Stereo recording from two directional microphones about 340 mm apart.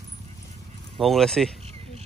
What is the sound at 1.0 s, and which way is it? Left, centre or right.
Speech, centre.